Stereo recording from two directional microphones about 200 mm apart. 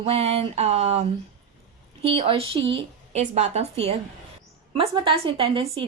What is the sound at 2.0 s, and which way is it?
A woman's voice, 30° right (ahead or behind).